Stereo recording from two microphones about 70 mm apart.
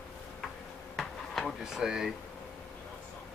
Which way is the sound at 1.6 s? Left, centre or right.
Centre.